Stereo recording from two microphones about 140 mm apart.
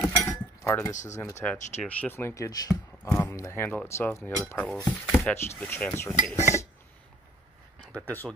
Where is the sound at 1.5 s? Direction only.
60° left (ahead or behind).